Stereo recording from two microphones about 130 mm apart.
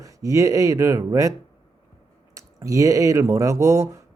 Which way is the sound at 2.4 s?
25° right (ahead or behind).